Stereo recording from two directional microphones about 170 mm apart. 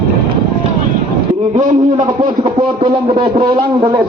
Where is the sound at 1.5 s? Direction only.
45° right (ahead or behind).